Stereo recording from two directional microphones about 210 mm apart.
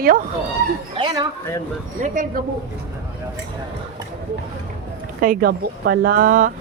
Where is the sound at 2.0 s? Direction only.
40° right (ahead or behind).